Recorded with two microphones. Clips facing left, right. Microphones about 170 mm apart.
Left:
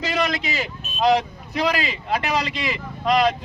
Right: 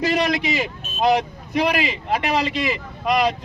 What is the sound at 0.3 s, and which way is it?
A man's voice, 20° right (ahead or behind).